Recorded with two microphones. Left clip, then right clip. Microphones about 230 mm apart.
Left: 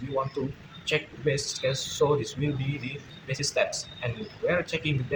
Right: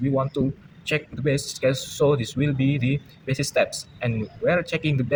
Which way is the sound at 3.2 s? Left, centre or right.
Right.